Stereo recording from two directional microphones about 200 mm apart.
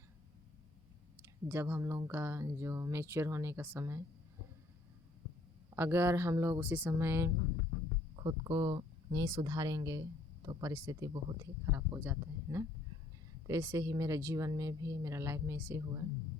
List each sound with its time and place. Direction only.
1.2 s speech: 10° right (ahead or behind)
5.7 s speech: 10° right (ahead or behind)